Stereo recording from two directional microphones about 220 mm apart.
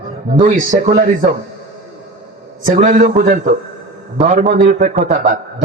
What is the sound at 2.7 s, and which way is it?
A man's voice, 35° right (ahead or behind).